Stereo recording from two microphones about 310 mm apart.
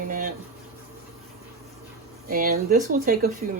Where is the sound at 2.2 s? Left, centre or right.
Right.